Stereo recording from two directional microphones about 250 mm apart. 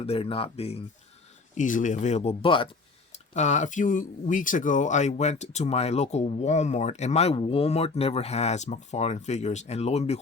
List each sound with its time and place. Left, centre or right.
0.0 s speech: left